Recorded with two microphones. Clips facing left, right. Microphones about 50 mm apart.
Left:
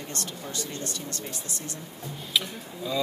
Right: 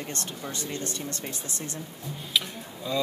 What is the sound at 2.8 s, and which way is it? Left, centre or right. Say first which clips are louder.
Speech: right 1 dB; centre.